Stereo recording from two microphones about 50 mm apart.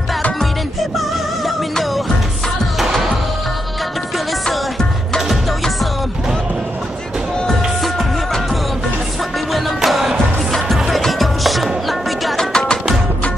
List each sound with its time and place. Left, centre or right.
0.4 s music: centre
4.5 s music: centre
9.5 s music: centre
12.4 s music: centre